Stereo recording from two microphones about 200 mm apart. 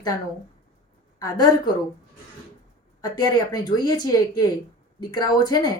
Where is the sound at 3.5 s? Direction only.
20° left (ahead or behind).